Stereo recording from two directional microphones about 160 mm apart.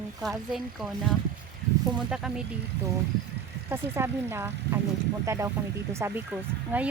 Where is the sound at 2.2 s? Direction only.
5° right (ahead or behind).